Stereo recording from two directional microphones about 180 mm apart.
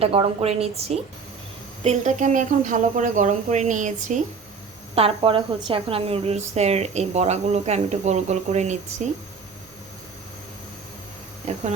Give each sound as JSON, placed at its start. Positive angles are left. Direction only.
{"t": 0.0, "sound": "a woman's voice", "side_deg": -35}
{"t": 4.9, "sound": "a woman's voice", "side_deg": -30}
{"t": 11.5, "sound": "speech", "side_deg": -40}